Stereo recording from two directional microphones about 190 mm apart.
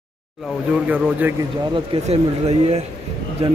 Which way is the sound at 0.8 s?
10° right (ahead or behind).